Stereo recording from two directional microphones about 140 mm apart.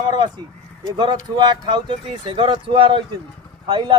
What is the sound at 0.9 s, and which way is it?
Speech, 30° right (ahead or behind).